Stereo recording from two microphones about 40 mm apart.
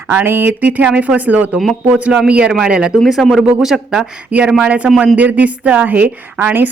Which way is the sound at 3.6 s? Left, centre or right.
Centre.